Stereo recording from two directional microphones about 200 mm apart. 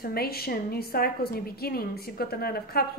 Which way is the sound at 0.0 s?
50° left (ahead or behind).